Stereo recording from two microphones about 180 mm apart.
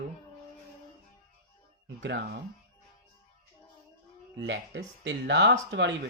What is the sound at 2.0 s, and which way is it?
Speech, 75° right (ahead or behind).